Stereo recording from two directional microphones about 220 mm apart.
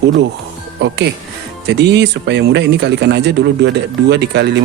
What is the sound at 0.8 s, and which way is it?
Speech, 50° right (ahead or behind).